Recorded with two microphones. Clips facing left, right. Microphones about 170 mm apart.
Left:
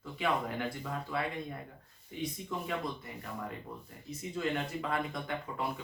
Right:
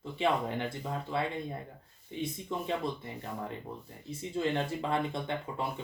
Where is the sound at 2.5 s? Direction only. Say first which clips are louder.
Right 4 dB; 25° right (ahead or behind).